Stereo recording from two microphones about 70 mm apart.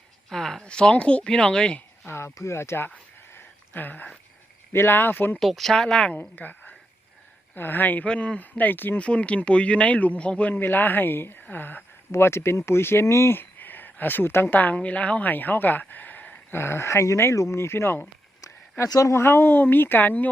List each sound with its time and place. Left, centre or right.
0.3 s speech: centre
2.0 s speech: left
3.3 s a sound: left
4.7 s speech: left
5.4 s speech: centre
6.1 s a woman's voice: left
9.0 s speech: centre
10.5 s speech: left
16.5 s speech: left